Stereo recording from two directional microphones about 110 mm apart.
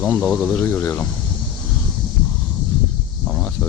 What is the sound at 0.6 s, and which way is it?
Speech, 25° left (ahead or behind).